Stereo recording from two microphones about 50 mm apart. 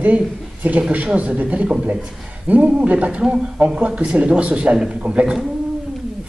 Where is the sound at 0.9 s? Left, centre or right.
Right.